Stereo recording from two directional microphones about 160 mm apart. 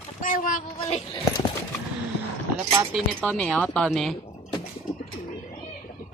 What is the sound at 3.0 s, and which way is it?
Speech, 5° left (ahead or behind).